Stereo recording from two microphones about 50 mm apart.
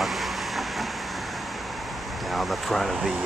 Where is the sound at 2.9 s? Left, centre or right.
Centre.